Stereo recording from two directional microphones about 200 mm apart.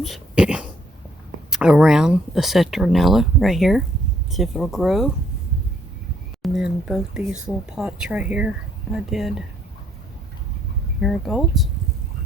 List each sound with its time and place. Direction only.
0.0 s dog: centre (ahead or behind)
1.5 s speech: 5° right (ahead or behind)
6.4 s a sound: 5° right (ahead or behind)
7.4 s speech: 5° right (ahead or behind)
11.0 s speech: centre (ahead or behind)